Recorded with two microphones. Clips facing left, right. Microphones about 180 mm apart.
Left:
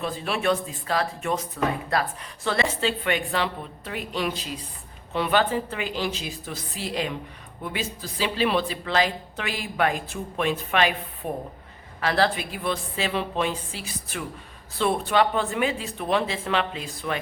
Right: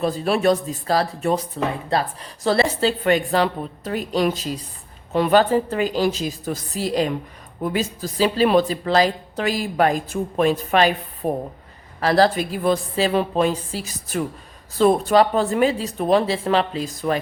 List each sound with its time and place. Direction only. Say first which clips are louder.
0.0 s speech: right 7 dB; 40° right (ahead or behind)